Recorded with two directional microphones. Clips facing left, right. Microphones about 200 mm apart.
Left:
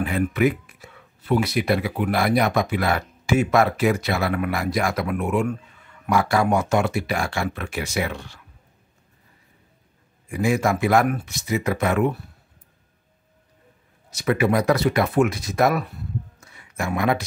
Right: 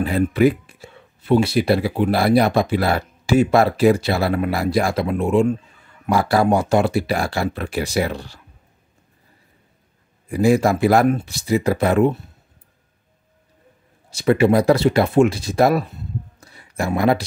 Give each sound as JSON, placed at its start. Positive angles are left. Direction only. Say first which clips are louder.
{"t": 0.0, "sound": "speech", "louder": "right 4 dB", "side_deg": -30}
{"t": 10.2, "sound": "speech", "louder": "right 5 dB", "side_deg": -35}
{"t": 14.1, "sound": "speech", "louder": "right 5 dB", "side_deg": -30}